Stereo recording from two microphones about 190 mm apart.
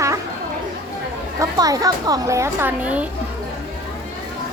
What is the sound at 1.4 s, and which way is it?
Speech, 20° right (ahead or behind).